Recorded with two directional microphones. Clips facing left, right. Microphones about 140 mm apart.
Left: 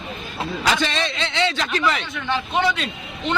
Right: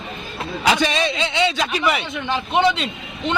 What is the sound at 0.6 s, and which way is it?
A man's voice, 15° right (ahead or behind).